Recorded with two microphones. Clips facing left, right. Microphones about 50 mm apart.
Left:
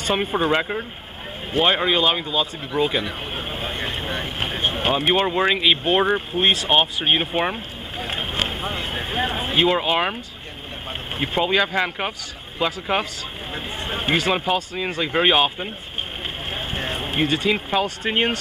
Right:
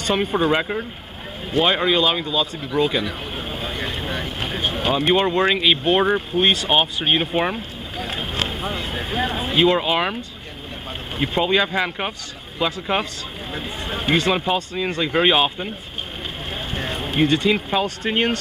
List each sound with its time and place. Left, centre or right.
0.5 s speech: centre
1.5 s speech: centre
5.0 s speech: centre
11.1 s speech: centre
16.5 s a sound: centre
17.7 s speech: centre